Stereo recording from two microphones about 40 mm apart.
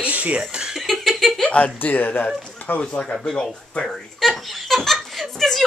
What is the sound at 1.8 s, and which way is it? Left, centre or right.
Speech, left.